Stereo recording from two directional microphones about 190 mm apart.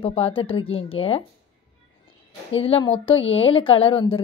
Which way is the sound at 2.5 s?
30° left (ahead or behind).